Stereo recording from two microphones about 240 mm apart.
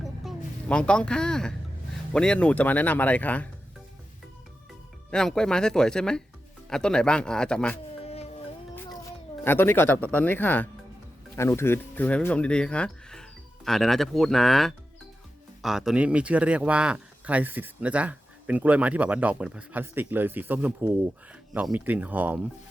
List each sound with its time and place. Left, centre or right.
0.0 s vehicle: centre
2.1 s speech: centre
5.1 s speech: centre
8.0 s music: left
9.4 s speech: centre